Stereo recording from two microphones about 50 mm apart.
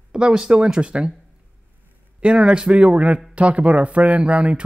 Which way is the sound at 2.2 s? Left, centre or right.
Right.